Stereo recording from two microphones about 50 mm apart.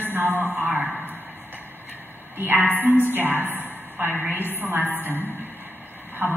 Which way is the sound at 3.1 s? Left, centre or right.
Right.